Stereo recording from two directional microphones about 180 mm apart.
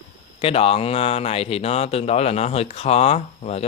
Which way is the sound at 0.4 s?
30° left (ahead or behind).